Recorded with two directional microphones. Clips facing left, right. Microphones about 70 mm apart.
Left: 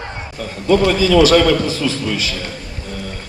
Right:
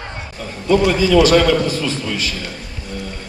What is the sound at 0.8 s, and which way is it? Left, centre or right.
Speech, centre.